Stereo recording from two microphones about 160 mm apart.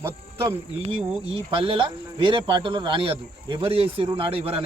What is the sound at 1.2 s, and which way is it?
Speech, 35° right (ahead or behind).